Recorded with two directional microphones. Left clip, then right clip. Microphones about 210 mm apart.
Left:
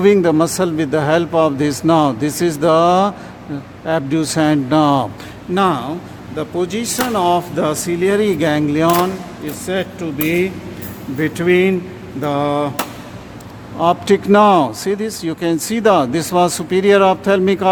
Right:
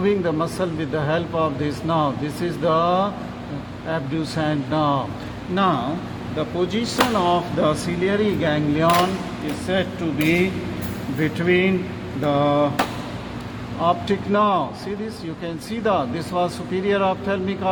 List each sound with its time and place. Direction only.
0.0 s speech: 50° left (ahead or behind)
13.8 s speech: 50° left (ahead or behind)